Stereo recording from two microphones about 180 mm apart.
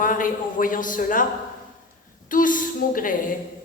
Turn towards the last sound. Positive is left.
turn(degrees=50)  # may be behind; listen again after turning